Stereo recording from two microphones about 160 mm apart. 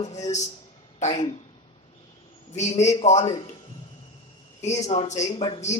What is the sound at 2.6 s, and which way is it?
Speech, 45° left (ahead or behind).